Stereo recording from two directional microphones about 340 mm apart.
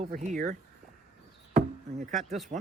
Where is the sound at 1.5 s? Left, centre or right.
Right.